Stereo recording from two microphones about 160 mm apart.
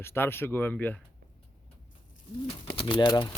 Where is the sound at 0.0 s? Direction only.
15° left (ahead or behind).